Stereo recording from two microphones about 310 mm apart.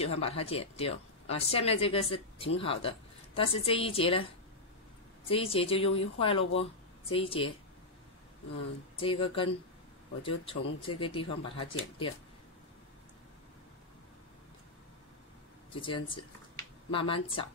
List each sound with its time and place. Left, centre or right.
0.0 s speech: centre
5.3 s speech: centre
8.9 s speech: centre
15.7 s speech: centre